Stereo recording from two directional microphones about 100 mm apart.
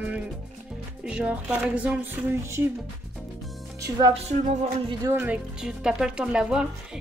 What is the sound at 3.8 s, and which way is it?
Speech, 40° right (ahead or behind).